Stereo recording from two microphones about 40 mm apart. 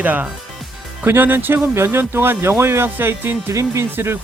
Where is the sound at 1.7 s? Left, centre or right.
Right.